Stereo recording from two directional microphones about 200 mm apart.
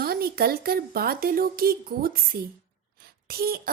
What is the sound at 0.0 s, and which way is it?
A woman's voice, 50° right (ahead or behind).